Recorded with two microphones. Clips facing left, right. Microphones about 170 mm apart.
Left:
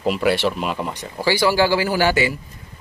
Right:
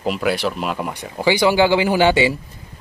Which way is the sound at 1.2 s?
20° right (ahead or behind).